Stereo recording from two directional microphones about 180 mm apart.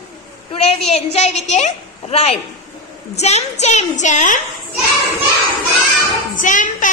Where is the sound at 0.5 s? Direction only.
30° left (ahead or behind).